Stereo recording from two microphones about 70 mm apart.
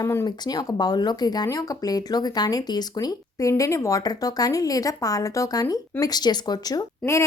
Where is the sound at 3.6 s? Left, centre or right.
Left.